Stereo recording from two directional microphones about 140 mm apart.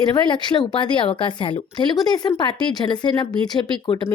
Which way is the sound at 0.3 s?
35° left (ahead or behind).